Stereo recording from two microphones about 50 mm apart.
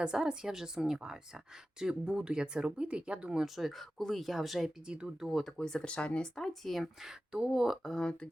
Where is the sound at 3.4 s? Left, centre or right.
Centre.